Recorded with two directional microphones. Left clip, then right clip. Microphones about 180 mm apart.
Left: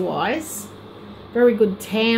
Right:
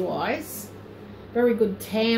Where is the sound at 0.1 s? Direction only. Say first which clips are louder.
Left 4 dB; 50° left (ahead or behind).